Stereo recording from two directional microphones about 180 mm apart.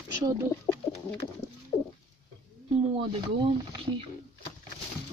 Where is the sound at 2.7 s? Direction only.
30° right (ahead or behind).